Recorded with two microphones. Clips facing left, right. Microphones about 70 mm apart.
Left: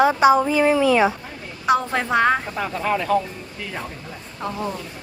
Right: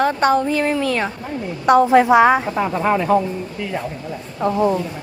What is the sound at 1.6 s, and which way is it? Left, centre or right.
Speech, centre.